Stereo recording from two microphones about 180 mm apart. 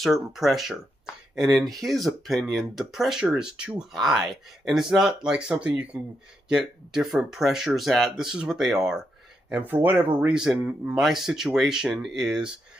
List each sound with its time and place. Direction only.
0.0 s speech: centre (ahead or behind)